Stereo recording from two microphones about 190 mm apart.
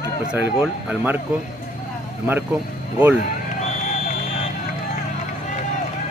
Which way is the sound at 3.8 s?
40° left (ahead or behind).